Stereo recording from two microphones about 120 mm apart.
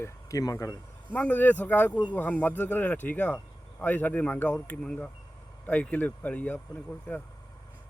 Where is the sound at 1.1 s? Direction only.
10° left (ahead or behind).